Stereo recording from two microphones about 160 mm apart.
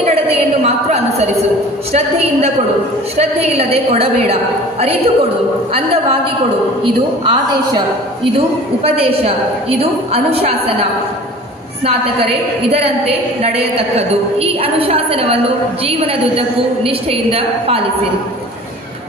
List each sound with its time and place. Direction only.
0.7 s a sound: 40° right (ahead or behind)
1.9 s a woman's voice: 40° right (ahead or behind)
6.8 s a woman's voice: 25° right (ahead or behind)
8.8 s a woman's voice: 35° right (ahead or behind)
13.9 s a woman's voice: 35° right (ahead or behind)